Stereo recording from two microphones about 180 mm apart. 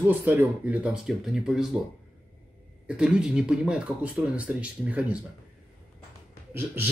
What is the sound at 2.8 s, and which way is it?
Speech, 5° right (ahead or behind).